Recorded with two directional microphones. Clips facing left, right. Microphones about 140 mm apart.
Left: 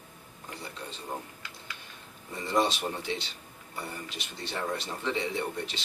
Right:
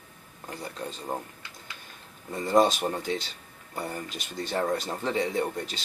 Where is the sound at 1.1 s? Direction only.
40° right (ahead or behind).